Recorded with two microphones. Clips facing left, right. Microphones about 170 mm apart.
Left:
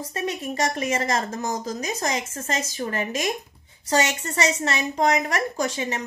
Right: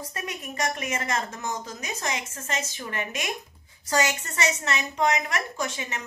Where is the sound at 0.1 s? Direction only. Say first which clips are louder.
Left 7 dB; 30° left (ahead or behind).